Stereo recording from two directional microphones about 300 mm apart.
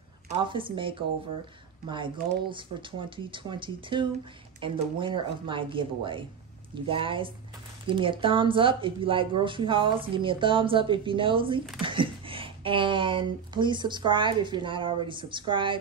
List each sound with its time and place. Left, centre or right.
0.3 s speech: centre